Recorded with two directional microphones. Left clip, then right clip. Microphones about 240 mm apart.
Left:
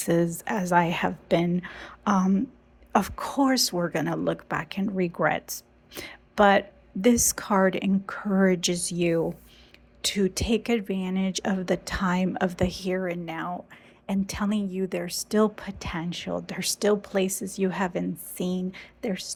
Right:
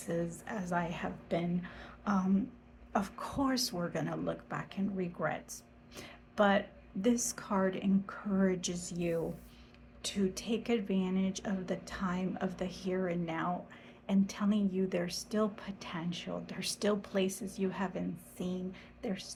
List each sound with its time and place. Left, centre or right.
0.0 s speech: left